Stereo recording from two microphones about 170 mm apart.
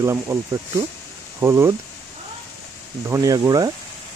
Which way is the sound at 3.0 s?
15° right (ahead or behind).